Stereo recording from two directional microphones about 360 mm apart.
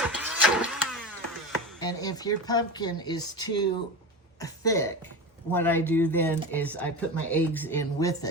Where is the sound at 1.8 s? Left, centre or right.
Centre.